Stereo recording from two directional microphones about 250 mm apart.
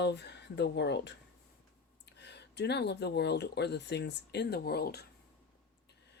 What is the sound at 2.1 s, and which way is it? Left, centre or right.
Speech, left.